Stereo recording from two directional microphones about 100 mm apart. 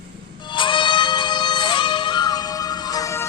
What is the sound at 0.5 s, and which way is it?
Music, 55° left (ahead or behind).